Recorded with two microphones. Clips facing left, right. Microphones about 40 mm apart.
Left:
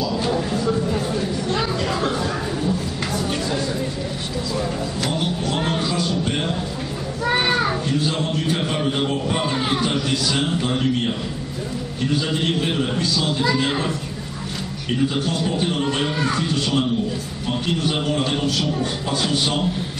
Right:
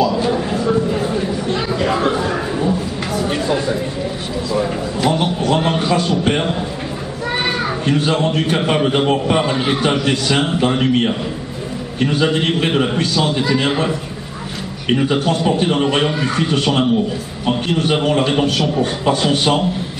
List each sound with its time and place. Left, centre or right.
0.1 s a sound: centre
5.1 s a sound: right
7.2 s children playing: centre
7.8 s a man's voice: right
9.4 s a man's voice: right
14.9 s a man's voice: right
16.1 s speech: centre
16.3 s a man's voice: right